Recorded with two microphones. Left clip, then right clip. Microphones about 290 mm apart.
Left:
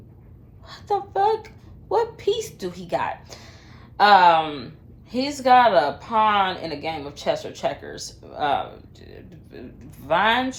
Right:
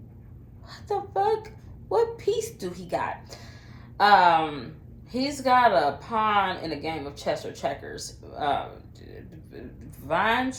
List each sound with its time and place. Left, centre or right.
0.7 s a woman's voice: left